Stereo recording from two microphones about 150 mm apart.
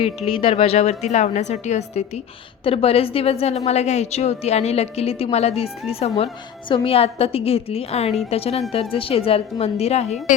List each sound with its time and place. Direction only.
0.0 s a woman's voice: 40° left (ahead or behind)